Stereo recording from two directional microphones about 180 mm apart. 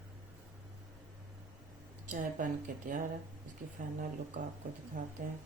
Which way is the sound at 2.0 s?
45° right (ahead or behind).